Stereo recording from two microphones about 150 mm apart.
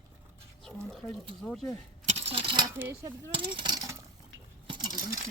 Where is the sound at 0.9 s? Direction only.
5° left (ahead or behind).